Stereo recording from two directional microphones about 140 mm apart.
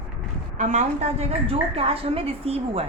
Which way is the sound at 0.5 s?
60° right (ahead or behind).